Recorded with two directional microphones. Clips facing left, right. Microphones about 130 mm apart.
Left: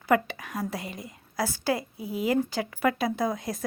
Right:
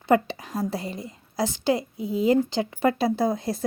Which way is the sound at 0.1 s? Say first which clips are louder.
Right 3 dB; 30° right (ahead or behind).